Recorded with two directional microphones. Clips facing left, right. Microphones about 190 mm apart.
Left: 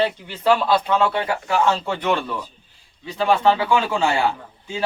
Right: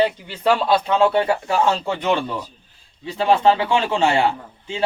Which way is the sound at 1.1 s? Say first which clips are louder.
Right 3 dB; 30° right (ahead or behind).